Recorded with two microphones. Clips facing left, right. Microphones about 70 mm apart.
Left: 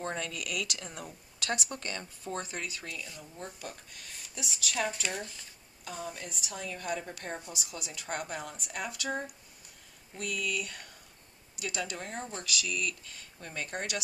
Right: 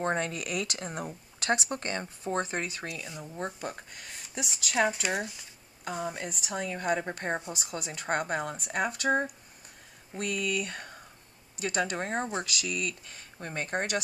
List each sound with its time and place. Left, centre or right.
0.0 s speech: right
3.0 s speech: right
3.3 s speech: right
12.3 s speech: right
13.4 s speech: right